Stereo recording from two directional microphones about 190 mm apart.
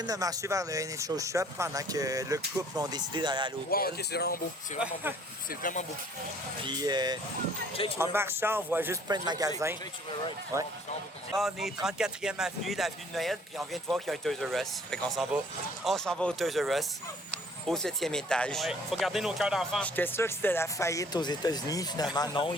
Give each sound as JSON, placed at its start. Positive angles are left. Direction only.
{"t": 0.0, "sound": "speech", "side_deg": -20}
{"t": 3.7, "sound": "speech", "side_deg": 55}
{"t": 5.5, "sound": "speech", "side_deg": 45}
{"t": 6.7, "sound": "speech", "side_deg": -20}
{"t": 11.3, "sound": "speech", "side_deg": 0}
{"t": 20.0, "sound": "speech", "side_deg": 10}